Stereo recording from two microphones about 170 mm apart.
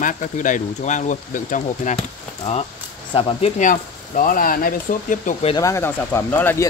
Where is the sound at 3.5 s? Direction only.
50° left (ahead or behind).